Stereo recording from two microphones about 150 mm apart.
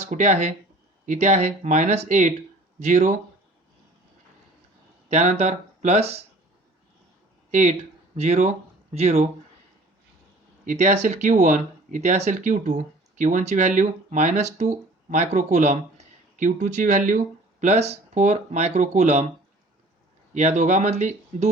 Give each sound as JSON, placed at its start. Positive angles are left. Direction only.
{"t": 0.0, "sound": "speech", "side_deg": -50}
{"t": 5.0, "sound": "speech", "side_deg": -50}
{"t": 7.5, "sound": "speech", "side_deg": -55}
{"t": 10.7, "sound": "speech", "side_deg": -55}
{"t": 20.3, "sound": "speech", "side_deg": -50}